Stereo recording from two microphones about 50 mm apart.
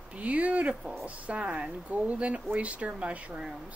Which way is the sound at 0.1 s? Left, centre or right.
Right.